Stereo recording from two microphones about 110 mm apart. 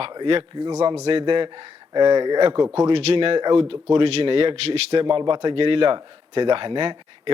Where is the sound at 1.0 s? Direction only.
55° right (ahead or behind).